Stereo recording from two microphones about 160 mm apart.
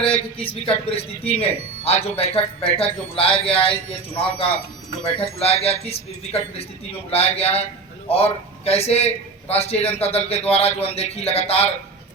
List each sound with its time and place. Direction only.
0.0 s a man's voice: 35° left (ahead or behind)